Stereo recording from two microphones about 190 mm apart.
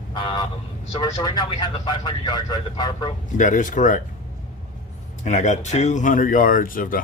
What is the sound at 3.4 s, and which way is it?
Speech, 45° left (ahead or behind).